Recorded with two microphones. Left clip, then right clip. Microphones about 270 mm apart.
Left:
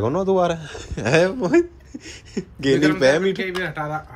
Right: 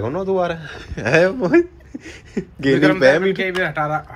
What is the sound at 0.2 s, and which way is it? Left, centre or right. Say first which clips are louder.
Speech: even; left.